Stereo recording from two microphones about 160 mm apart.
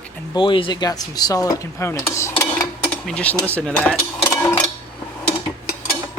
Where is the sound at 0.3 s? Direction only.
30° left (ahead or behind).